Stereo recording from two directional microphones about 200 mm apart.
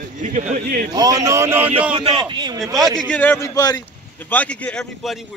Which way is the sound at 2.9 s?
5° left (ahead or behind).